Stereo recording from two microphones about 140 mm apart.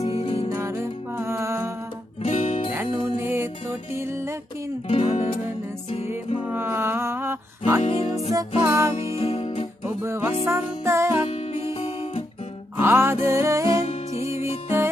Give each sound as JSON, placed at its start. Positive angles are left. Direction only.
{"t": 0.0, "sound": "music", "side_deg": 40}
{"t": 0.5, "sound": "music", "side_deg": -20}
{"t": 2.2, "sound": "music", "side_deg": 45}
{"t": 3.2, "sound": "music", "side_deg": -15}
{"t": 4.8, "sound": "music", "side_deg": 45}
{"t": 6.4, "sound": "music", "side_deg": -15}
{"t": 7.8, "sound": "music", "side_deg": 50}
{"t": 8.3, "sound": "music", "side_deg": -20}
{"t": 8.9, "sound": "music", "side_deg": 45}
{"t": 9.8, "sound": "music", "side_deg": -15}
{"t": 11.2, "sound": "music", "side_deg": 50}
{"t": 12.7, "sound": "music", "side_deg": -15}
{"t": 13.7, "sound": "music", "side_deg": 45}